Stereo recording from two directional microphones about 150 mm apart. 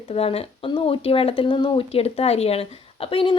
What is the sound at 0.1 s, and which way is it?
Speech, 40° left (ahead or behind).